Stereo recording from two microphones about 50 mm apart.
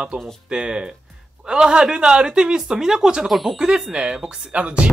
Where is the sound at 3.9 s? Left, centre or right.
Centre.